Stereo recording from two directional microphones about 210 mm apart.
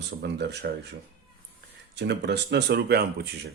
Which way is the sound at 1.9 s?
55° right (ahead or behind).